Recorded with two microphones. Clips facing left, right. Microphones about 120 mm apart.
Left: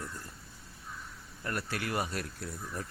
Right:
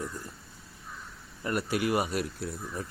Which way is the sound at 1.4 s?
10° right (ahead or behind).